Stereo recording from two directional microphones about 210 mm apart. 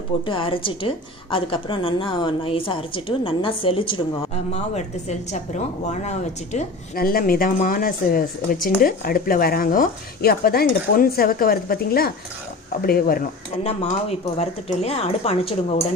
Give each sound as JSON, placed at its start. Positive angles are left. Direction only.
{"t": 0.3, "sound": "a woman's voice", "side_deg": 25}
{"t": 6.9, "sound": "speech", "side_deg": 45}
{"t": 14.3, "sound": "a woman's voice", "side_deg": 30}